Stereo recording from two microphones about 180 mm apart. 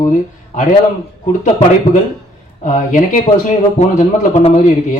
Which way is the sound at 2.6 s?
45° left (ahead or behind).